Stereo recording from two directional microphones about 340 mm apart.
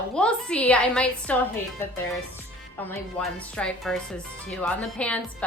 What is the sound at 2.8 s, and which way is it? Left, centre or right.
A woman's voice, centre.